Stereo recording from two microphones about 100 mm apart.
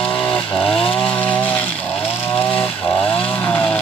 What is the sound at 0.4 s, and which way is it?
Chainsaw, 55° left (ahead or behind).